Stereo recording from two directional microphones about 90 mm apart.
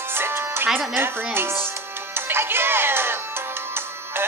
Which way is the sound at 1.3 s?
25° right (ahead or behind).